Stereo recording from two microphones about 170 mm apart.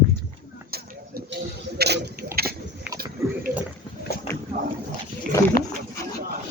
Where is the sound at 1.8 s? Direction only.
75° right (ahead or behind).